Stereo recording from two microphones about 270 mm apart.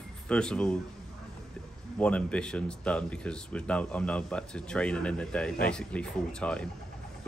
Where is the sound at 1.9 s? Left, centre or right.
Centre.